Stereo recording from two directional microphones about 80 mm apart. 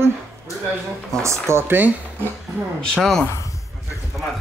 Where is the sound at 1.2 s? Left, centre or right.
Right.